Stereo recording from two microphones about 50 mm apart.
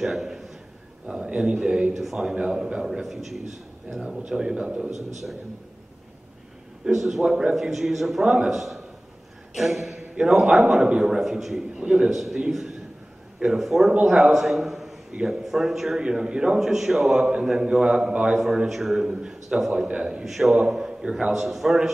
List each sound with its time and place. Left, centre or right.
0.0 s a sound: centre
1.0 s a man's voice: centre
2.0 s a man's voice: centre
4.9 s a man's voice: centre
6.8 s a man's voice: centre
18.7 s a man's voice: centre
20.2 s a man's voice: centre
21.3 s a man's voice: centre